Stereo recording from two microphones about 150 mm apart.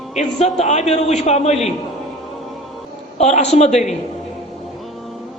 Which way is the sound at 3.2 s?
45° left (ahead or behind).